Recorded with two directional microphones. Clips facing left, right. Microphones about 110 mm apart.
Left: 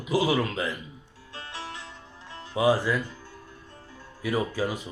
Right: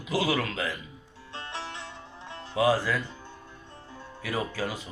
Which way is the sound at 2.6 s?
15° left (ahead or behind).